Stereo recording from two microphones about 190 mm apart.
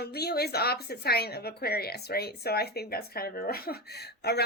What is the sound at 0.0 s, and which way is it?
Speech, 55° left (ahead or behind).